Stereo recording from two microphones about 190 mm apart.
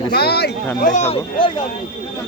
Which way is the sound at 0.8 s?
40° left (ahead or behind).